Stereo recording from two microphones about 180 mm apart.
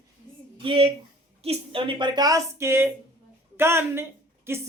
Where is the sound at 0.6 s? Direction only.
30° right (ahead or behind).